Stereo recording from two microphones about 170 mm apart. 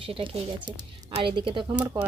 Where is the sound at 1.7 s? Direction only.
10° right (ahead or behind).